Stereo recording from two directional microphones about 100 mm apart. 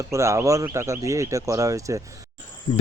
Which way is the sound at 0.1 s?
30° right (ahead or behind).